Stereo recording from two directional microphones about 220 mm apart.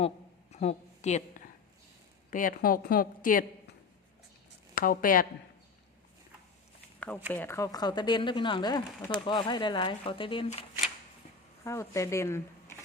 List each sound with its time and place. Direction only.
0.5 s a woman's voice: 30° left (ahead or behind)
4.7 s a woman's voice: 40° left (ahead or behind)
7.3 s speech: 10° left (ahead or behind)
11.6 s speech: 15° left (ahead or behind)